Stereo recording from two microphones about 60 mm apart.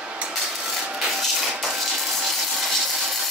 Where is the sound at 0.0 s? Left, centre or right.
Centre.